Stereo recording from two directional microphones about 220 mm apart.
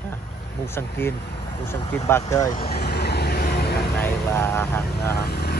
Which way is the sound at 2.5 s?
45° left (ahead or behind).